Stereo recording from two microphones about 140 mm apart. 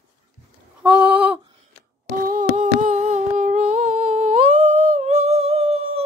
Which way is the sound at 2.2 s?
75° right (ahead or behind).